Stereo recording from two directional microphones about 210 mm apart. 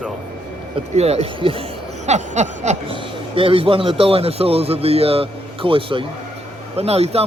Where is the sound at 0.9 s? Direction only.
30° right (ahead or behind).